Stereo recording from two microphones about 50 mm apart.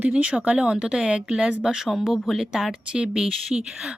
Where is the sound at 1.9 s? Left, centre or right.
Centre.